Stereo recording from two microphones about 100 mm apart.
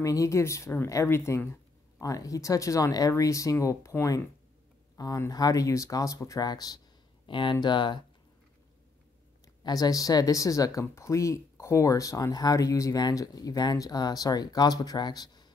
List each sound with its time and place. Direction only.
0.0 s speech: 35° left (ahead or behind)
7.2 s speech: 55° left (ahead or behind)
9.6 s speech: 40° left (ahead or behind)